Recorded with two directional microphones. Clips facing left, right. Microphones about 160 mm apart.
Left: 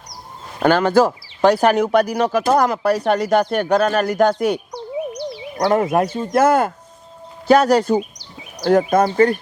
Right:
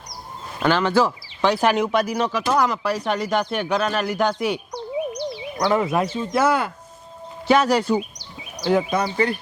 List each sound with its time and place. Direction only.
0.6 s speech: 50° left (ahead or behind)
4.7 s a sound: 15° right (ahead or behind)
5.5 s speech: 45° left (ahead or behind)